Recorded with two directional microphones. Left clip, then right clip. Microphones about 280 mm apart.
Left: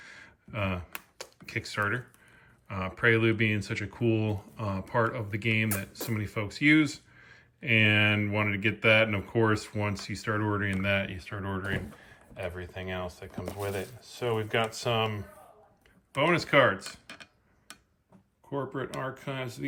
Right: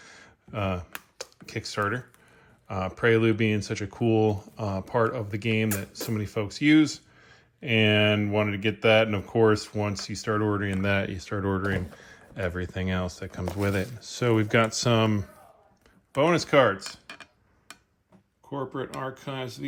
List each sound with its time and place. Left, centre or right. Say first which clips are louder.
0.0 s computer keyboard: left 1 dB; centre
2.6 s speech: right 2 dB; centre
14.4 s speech: right 5 dB; right
16.1 s speech: right 3 dB; centre
18.5 s speech: right 1 dB; centre